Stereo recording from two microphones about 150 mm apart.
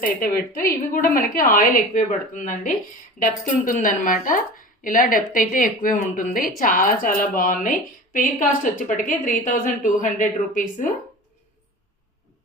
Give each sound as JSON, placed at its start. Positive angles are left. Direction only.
{"t": 0.0, "sound": "a woman's voice", "side_deg": 70}